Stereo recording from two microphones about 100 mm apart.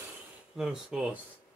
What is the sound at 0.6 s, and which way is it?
Speech, 5° right (ahead or behind).